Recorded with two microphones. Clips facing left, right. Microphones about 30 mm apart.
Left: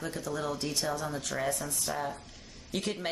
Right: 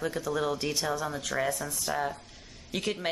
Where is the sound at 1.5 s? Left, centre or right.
Centre.